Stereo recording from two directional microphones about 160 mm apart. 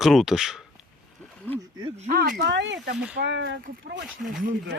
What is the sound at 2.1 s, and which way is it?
Speech, 70° right (ahead or behind).